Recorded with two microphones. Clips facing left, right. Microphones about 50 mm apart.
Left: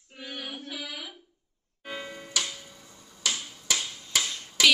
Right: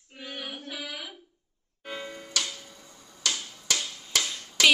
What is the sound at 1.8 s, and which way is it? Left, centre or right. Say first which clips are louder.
Music: even; centre.